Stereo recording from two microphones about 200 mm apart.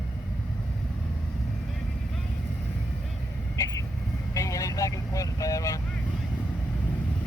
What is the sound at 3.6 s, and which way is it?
Vehicle, 15° left (ahead or behind).